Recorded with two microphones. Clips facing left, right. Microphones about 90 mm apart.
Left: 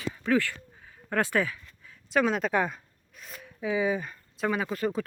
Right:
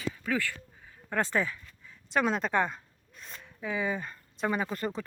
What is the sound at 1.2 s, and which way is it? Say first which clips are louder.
Speech: left 2 dB; 10° left (ahead or behind).